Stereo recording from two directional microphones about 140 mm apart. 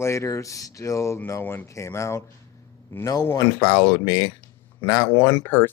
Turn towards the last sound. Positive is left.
turn(degrees=15)  # may be behind; listen again after turning